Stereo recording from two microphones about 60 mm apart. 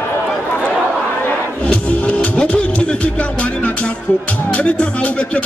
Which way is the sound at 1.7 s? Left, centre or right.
Left.